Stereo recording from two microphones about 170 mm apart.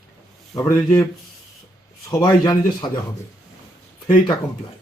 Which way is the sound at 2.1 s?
20° left (ahead or behind).